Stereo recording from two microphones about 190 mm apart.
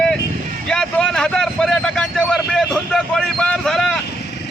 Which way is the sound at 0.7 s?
5° left (ahead or behind).